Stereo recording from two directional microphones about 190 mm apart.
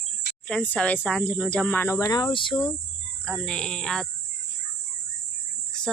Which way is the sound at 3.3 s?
5° left (ahead or behind).